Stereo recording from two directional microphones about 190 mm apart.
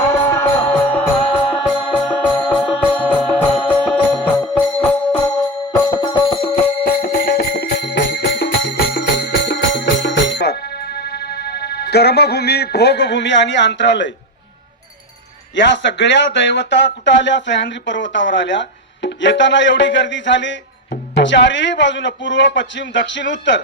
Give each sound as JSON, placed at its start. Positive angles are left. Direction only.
{"t": 0.1, "sound": "music", "side_deg": 15}
{"t": 5.7, "sound": "music", "side_deg": 20}
{"t": 6.8, "sound": "music", "side_deg": 50}
{"t": 15.5, "sound": "speech", "side_deg": 70}